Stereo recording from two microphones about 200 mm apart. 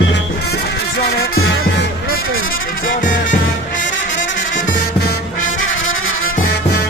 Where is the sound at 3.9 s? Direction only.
70° left (ahead or behind); by 6.3 s 85° left.